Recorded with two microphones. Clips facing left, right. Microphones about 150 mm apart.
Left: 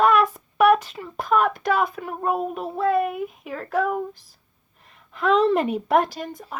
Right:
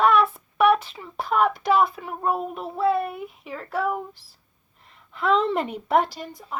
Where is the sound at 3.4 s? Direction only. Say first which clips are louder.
Left 3 dB; 50° left (ahead or behind).